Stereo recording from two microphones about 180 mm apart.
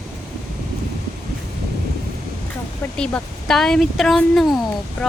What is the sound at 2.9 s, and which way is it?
Speech, 5° left (ahead or behind).